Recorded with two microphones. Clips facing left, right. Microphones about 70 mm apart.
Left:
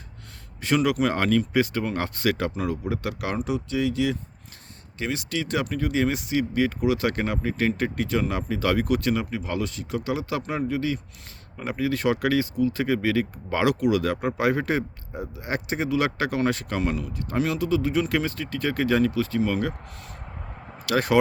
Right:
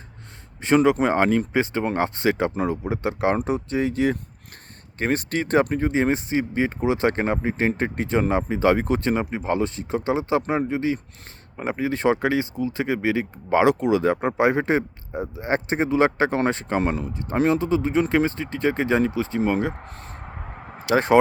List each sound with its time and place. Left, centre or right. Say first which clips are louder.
0.6 s speech: right 4 dB; right